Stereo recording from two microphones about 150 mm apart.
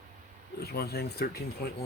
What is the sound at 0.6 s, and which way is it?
Speech, 90° left.